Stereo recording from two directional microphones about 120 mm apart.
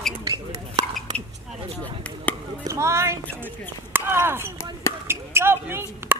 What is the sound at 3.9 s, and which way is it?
Speech, 20° right (ahead or behind).